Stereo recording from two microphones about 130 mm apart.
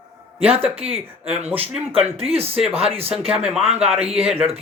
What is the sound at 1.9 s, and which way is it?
Speech, 50° right (ahead or behind).